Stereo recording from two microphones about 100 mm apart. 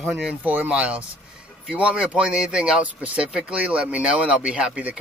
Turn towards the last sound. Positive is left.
turn(degrees=-15)  # may be behind; listen again after turning